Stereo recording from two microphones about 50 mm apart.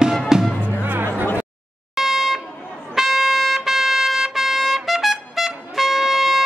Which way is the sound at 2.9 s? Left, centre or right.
Centre.